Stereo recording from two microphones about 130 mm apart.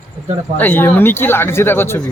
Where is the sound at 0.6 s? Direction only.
15° left (ahead or behind).